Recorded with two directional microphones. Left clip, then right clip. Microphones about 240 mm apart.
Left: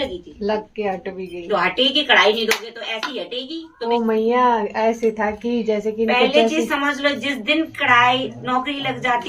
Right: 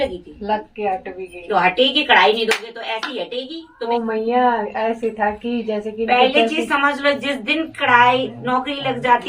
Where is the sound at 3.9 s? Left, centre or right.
Left.